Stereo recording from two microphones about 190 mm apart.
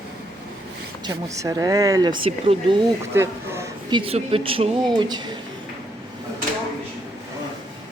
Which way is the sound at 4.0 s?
30° right (ahead or behind).